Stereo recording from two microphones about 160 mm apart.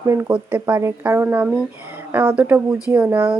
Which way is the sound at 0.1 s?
15° right (ahead or behind).